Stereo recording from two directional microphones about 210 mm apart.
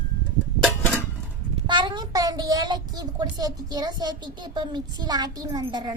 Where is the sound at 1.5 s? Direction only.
20° right (ahead or behind).